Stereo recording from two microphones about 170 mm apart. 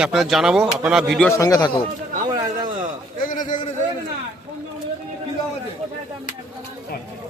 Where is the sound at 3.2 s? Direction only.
50° left (ahead or behind).